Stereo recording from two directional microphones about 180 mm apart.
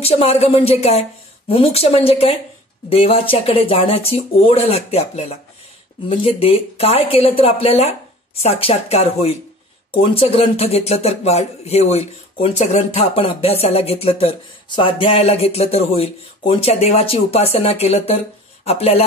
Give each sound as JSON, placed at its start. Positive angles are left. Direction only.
{"t": 0.0, "sound": "speech", "side_deg": 35}